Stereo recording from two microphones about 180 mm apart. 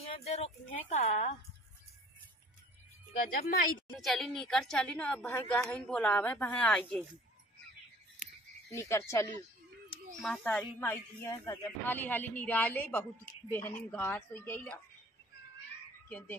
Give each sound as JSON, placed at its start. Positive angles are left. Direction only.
{"t": 0.0, "sound": "speech", "side_deg": 35}
{"t": 3.1, "sound": "speech", "side_deg": 55}
{"t": 3.9, "sound": "a woman's voice", "side_deg": 0}
{"t": 8.7, "sound": "speech", "side_deg": 15}
{"t": 10.2, "sound": "a woman's voice", "side_deg": 5}
{"t": 16.1, "sound": "speech", "side_deg": 10}